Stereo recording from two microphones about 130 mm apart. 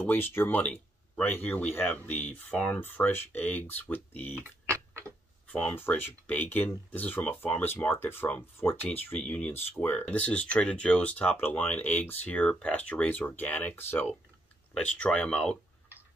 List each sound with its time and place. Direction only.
0.0 s speech: 15° left (ahead or behind)
4.4 s tick-tock: 20° right (ahead or behind)
5.5 s speech: 10° left (ahead or behind)